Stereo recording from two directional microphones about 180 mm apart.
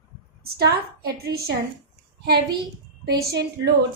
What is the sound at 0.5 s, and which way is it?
Speech, 60° right (ahead or behind).